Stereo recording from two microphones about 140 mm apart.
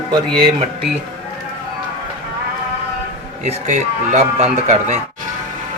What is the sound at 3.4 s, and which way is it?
Speech, 55° right (ahead or behind).